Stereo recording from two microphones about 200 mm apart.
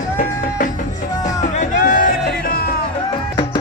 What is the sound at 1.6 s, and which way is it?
Music, 45° left (ahead or behind).